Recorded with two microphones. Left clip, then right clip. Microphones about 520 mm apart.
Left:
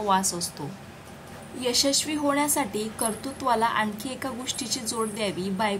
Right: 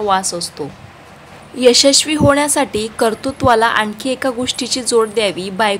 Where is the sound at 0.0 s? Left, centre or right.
Left.